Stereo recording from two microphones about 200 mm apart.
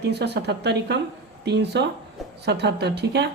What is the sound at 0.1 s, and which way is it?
A woman's voice, 55° right (ahead or behind).